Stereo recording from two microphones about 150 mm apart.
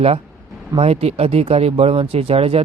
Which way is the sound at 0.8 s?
40° right (ahead or behind).